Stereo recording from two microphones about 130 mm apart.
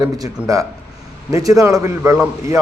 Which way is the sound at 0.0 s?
25° right (ahead or behind).